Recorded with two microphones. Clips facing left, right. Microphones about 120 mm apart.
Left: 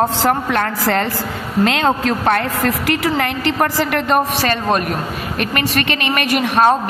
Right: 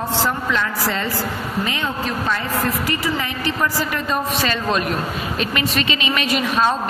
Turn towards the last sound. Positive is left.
turn(degrees=55)  # may be behind; listen again after turning